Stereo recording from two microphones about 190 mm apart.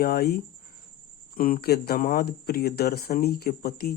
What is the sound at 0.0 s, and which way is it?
Speech, 55° left (ahead or behind).